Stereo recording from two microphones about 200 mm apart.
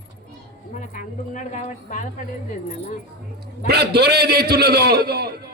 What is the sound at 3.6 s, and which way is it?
A man's voice, 55° right (ahead or behind).